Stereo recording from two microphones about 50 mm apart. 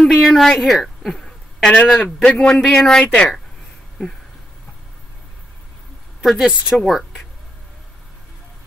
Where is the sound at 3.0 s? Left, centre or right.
Left.